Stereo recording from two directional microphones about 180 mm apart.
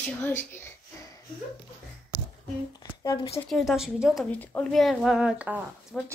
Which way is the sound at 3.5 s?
Centre (ahead or behind).